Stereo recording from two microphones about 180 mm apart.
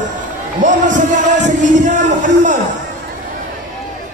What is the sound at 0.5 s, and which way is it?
Music, 45° right (ahead or behind).